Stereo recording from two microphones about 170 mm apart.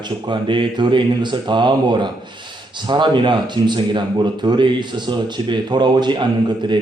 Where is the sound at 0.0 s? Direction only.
30° right (ahead or behind).